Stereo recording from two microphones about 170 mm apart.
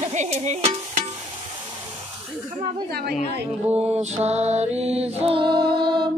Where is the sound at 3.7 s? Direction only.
10° right (ahead or behind).